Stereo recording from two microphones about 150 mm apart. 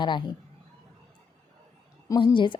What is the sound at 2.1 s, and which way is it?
Speech, 35° left (ahead or behind).